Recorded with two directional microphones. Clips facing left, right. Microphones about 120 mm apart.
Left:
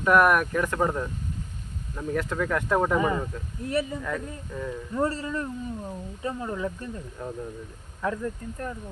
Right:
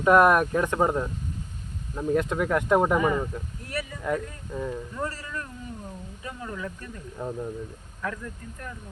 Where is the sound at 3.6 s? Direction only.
25° left (ahead or behind).